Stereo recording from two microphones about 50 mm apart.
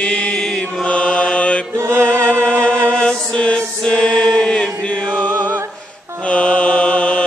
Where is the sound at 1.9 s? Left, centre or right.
Right.